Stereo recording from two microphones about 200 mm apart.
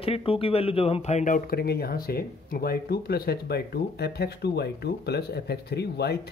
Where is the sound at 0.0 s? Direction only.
30° left (ahead or behind).